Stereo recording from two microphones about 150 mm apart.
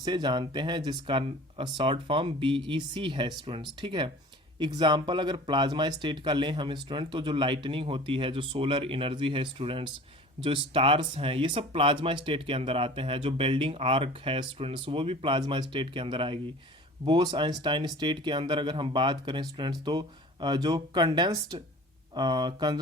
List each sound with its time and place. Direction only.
0.0 s speech: 30° right (ahead or behind)